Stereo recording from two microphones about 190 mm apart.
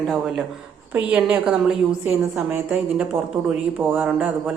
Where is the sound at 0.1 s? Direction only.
Centre (ahead or behind).